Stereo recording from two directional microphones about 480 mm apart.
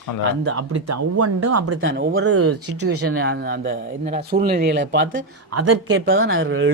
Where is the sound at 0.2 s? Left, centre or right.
Right.